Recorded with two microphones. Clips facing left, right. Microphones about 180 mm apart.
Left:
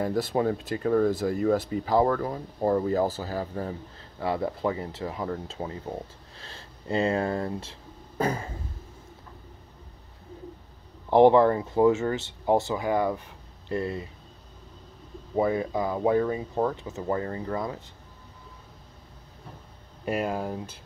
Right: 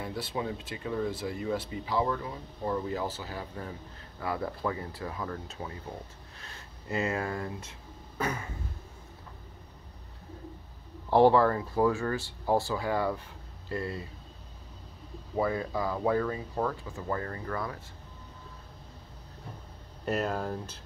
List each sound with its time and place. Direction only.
0.0 s speech: 45° left (ahead or behind)
4.2 s speech: 25° left (ahead or behind)
8.2 s a sound: 30° left (ahead or behind)
11.1 s speech: 20° left (ahead or behind)
15.3 s speech: 20° left (ahead or behind)
20.1 s speech: 10° left (ahead or behind)